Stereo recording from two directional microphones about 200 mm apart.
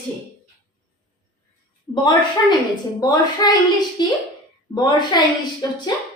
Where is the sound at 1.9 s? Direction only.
20° left (ahead or behind).